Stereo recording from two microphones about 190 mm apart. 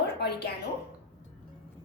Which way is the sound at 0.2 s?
60° left (ahead or behind).